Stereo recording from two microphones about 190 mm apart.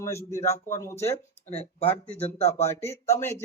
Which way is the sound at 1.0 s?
35° left (ahead or behind).